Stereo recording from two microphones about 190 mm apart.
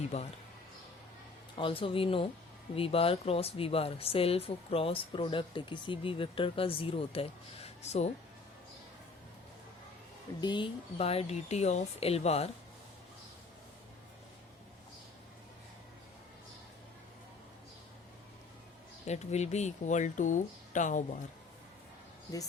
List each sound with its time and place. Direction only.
0.1 s speech: 35° left (ahead or behind)
1.5 s speech: 25° left (ahead or behind)
10.4 s speech: 25° left (ahead or behind)
19.0 s speech: 35° left (ahead or behind)